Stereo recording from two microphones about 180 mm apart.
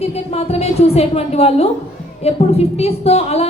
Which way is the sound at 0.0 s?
35° left (ahead or behind).